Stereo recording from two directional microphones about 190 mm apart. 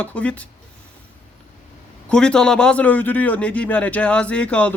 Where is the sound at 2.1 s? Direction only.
5° left (ahead or behind).